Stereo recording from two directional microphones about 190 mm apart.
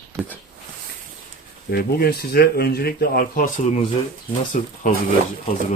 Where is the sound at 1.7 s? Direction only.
55° left (ahead or behind).